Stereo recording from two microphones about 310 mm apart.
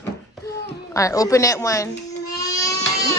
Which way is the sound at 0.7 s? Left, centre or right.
Centre.